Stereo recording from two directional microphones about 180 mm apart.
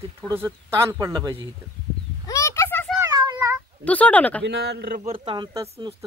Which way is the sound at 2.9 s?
20° right (ahead or behind).